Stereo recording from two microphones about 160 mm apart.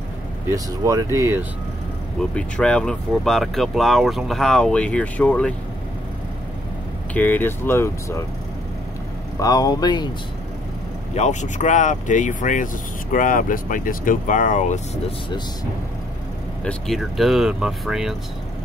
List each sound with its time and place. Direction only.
0.5 s speech: 20° right (ahead or behind)
2.3 s speech: 5° left (ahead or behind)
7.2 s speech: 10° left (ahead or behind)
9.4 s speech: 25° left (ahead or behind)
11.1 s speech: 50° left (ahead or behind)
16.6 s speech: centre (ahead or behind)